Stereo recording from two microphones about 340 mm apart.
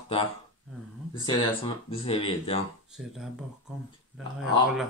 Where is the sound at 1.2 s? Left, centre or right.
Centre.